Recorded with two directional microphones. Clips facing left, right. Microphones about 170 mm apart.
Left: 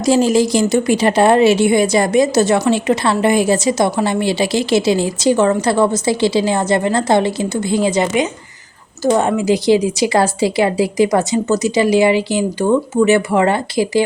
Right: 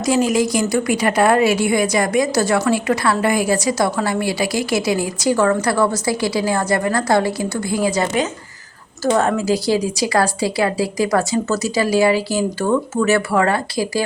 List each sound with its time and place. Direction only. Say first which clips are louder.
0.0 s a woman's voice: left 4 dB; 30° left (ahead or behind)
9.0 s a woman's voice: left 3 dB; 15° left (ahead or behind)